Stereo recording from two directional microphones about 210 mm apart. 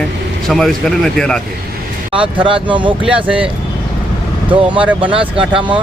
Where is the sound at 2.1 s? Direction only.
25° right (ahead or behind).